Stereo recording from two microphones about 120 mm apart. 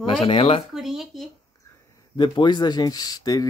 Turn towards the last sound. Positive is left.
turn(degrees=30)  # may be behind; listen again after turning